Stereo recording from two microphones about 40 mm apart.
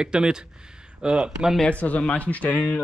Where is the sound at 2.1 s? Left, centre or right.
Left.